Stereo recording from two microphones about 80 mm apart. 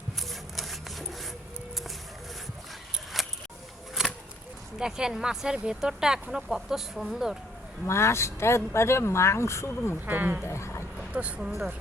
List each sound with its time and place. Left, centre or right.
0.2 s wood: centre
3.1 s a sound: centre
4.8 s speech: centre
7.9 s speech: left
10.1 s speech: right
10.4 s speech: left
10.9 s vehicle: centre
11.3 s speech: centre